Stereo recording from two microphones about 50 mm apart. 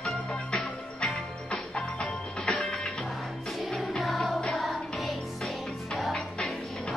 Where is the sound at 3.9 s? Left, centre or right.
Centre.